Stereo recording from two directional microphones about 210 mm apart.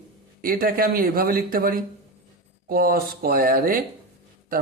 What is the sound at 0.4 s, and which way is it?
Speech, 45° right (ahead or behind).